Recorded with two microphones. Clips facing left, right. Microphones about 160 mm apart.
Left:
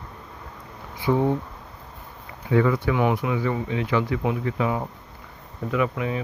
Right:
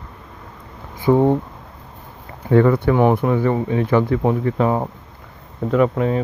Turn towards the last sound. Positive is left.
turn(degrees=-40)  # may be behind; listen again after turning